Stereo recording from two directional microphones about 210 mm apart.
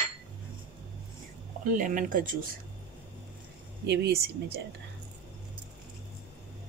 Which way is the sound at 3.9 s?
50° right (ahead or behind).